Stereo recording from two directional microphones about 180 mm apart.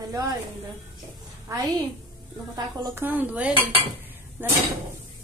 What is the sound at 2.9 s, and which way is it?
A woman's voice, 10° right (ahead or behind).